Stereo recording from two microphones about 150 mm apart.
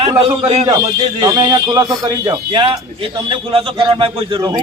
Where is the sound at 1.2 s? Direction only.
20° right (ahead or behind).